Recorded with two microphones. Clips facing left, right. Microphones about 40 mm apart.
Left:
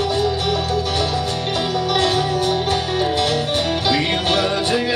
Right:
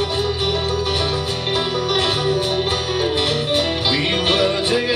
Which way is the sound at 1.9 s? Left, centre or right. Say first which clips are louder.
Left 1 dB; right.